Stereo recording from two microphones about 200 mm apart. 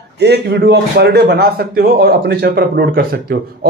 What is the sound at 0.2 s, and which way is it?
A man's voice, 55° right (ahead or behind).